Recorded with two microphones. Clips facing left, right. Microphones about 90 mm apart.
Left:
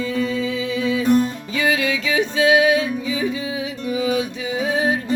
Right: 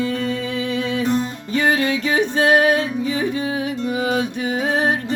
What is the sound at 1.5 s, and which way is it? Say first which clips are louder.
Music: right 3 dB; 45° right (ahead or behind).